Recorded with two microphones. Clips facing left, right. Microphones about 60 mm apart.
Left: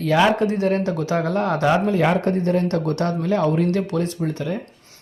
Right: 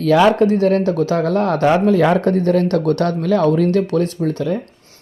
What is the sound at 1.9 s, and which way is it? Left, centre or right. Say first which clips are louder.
Speech: right 5 dB; right.